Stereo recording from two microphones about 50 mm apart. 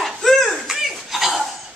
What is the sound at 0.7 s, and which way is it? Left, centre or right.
Cough, centre.